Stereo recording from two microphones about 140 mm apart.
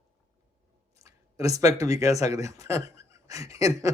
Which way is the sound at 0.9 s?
25° right (ahead or behind).